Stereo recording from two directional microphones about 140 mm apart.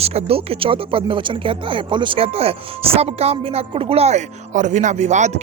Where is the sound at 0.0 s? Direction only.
45° right (ahead or behind).